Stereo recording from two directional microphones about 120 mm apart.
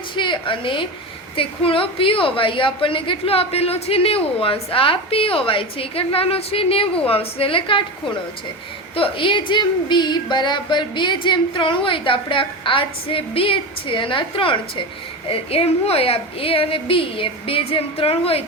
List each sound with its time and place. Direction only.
0.2 s a woman's voice: 45° left (ahead or behind)
9.0 s a woman's voice: 45° left (ahead or behind)